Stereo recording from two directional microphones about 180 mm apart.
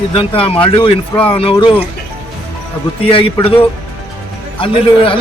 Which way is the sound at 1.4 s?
30° left (ahead or behind).